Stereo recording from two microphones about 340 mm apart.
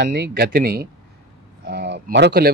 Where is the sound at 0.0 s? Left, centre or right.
Right.